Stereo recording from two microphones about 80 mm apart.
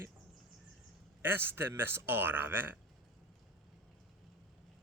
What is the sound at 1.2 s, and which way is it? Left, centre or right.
Speech, right.